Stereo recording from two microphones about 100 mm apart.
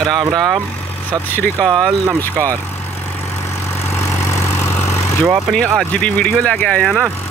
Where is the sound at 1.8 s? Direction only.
30° right (ahead or behind).